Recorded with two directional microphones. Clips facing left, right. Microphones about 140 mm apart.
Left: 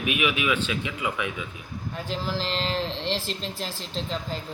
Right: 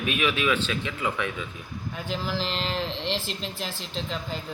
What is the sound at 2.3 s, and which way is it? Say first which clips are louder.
Speech: even; 5° right (ahead or behind).